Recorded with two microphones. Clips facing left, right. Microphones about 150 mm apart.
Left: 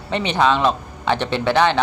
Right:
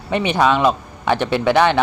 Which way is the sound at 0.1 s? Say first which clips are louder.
Right 2 dB; 15° right (ahead or behind).